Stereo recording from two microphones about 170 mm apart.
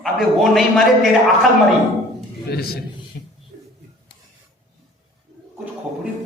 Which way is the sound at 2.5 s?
65° left (ahead or behind).